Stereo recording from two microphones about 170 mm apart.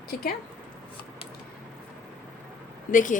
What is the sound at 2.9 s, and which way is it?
Speech, 50° left (ahead or behind).